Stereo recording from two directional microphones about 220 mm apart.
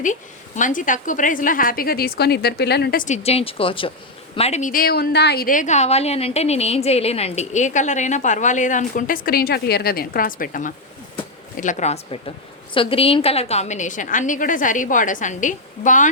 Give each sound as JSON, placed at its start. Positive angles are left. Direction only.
{"t": 0.0, "sound": "a woman's voice", "side_deg": 35}